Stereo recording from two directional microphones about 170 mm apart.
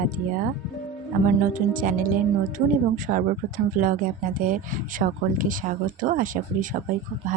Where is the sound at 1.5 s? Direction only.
55° right (ahead or behind).